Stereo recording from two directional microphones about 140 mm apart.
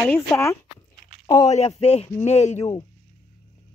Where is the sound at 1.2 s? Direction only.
25° left (ahead or behind).